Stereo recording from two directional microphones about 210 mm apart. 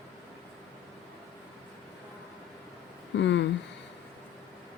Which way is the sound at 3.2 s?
55° left (ahead or behind).